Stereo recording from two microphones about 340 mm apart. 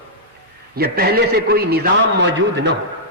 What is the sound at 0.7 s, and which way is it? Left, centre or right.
A man's voice, right.